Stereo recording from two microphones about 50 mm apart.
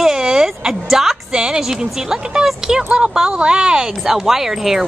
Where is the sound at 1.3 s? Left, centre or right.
Centre.